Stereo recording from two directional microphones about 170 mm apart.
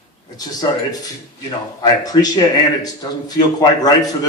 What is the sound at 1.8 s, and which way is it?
A man's voice, 20° left (ahead or behind).